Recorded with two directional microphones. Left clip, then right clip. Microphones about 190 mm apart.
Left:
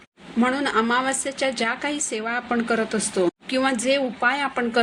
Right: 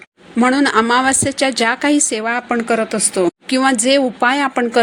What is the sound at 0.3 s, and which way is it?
A woman's voice, 45° right (ahead or behind).